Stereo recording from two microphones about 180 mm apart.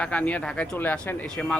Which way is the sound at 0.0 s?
10° left (ahead or behind).